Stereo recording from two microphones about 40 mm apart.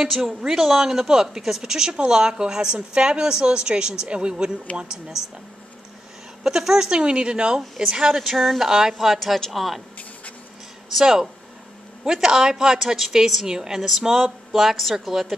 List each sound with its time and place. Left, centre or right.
0.0 s a woman's voice: centre
6.4 s a woman's voice: centre
8.1 s a woman's voice: centre
10.9 s a woman's voice: centre